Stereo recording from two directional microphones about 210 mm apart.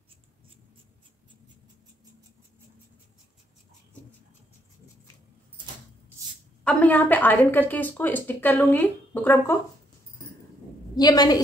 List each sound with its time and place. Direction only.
6.6 s a woman's voice: 5° left (ahead or behind)
11.0 s a woman's voice: 20° left (ahead or behind)